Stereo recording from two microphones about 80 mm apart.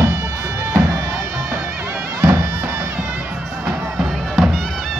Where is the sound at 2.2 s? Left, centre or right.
Right.